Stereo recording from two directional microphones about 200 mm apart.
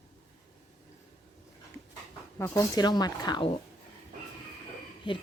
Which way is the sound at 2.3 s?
15° left (ahead or behind).